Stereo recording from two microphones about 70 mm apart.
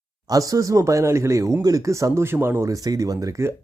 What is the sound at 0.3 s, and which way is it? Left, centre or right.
Speech, right.